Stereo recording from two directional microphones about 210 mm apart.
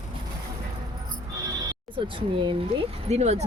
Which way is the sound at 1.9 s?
25° right (ahead or behind).